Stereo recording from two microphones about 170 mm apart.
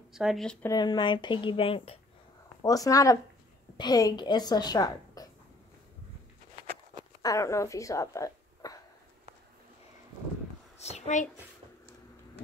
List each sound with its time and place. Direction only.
0.1 s speech: 5° right (ahead or behind)
0.7 s speech: 25° left (ahead or behind)
2.6 s a woman's voice: 20° left (ahead or behind)
7.2 s speech: 20° left (ahead or behind)
10.8 s a sound: 40° left (ahead or behind)